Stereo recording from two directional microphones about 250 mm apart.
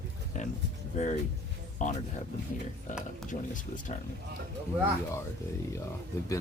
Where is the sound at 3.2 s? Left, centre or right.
Left.